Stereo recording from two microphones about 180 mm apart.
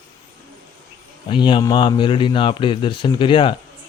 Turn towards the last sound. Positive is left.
turn(degrees=30)  # may be behind; listen again after turning